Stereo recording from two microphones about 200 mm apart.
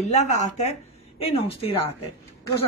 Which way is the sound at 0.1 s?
35° left (ahead or behind).